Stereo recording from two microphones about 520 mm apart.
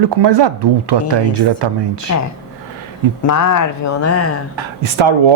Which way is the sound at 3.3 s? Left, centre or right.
Left.